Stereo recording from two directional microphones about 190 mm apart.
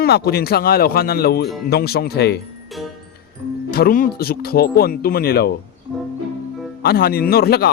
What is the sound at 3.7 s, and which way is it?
A man's voice, 50° left (ahead or behind).